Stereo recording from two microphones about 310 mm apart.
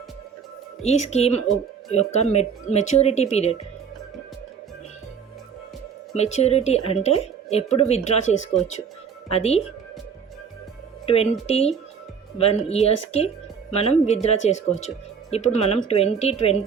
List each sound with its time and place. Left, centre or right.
0.8 s a woman's voice: left
6.1 s a woman's voice: left
11.0 s a woman's voice: centre